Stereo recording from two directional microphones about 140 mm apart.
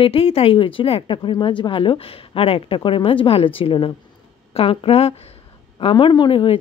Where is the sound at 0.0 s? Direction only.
45° left (ahead or behind).